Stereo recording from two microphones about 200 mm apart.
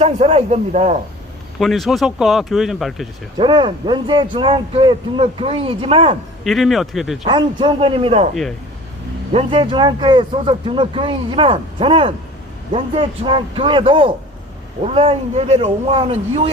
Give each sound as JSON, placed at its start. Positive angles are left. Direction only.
{"t": 0.0, "sound": "speech", "side_deg": -30}
{"t": 1.5, "sound": "speech", "side_deg": 0}
{"t": 3.3, "sound": "speech", "side_deg": -25}
{"t": 6.4, "sound": "speech", "side_deg": 0}
{"t": 7.3, "sound": "speech", "side_deg": -25}
{"t": 9.3, "sound": "speech", "side_deg": -30}